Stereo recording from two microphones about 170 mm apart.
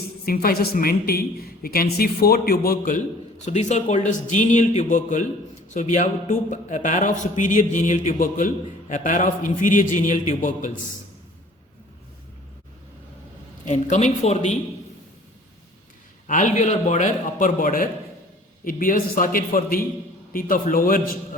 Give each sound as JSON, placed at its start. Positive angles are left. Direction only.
{"t": 0.3, "sound": "a woman's voice", "side_deg": 60}
{"t": 3.4, "sound": "a man's voice", "side_deg": 45}
{"t": 13.7, "sound": "a man's voice", "side_deg": 45}
{"t": 16.2, "sound": "a man's voice", "side_deg": 45}